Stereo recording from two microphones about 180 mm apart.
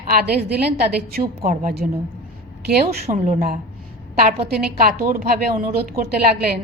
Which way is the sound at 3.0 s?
45° right (ahead or behind).